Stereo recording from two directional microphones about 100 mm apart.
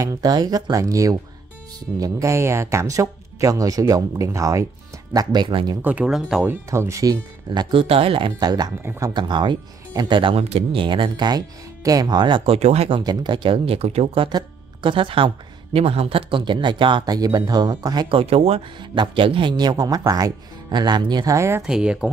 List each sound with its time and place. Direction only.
0.0 s speech: 40° right (ahead or behind)
5.1 s speech: 45° right (ahead or behind)
5.8 s speech: 15° right (ahead or behind)
6.0 s speech: 5° right (ahead or behind)
6.4 s speech: 25° right (ahead or behind)
7.7 s speech: 70° right (ahead or behind)
8.4 s speech: 45° right (ahead or behind); by 13.0 s 90° right
13.0 s speech: 45° right (ahead or behind); by 14.3 s 80° right
14.3 s speech: 55° right (ahead or behind); by 18.0 s 40° right (ahead or behind)
18.1 s speech: 80° right
18.8 s speech: 55° right (ahead or behind)
21.4 s speech: 25° right (ahead or behind)
21.6 s speech: 5° right (ahead or behind)